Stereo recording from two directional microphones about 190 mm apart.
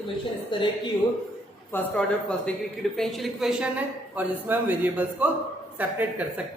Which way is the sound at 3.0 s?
Centre (ahead or behind).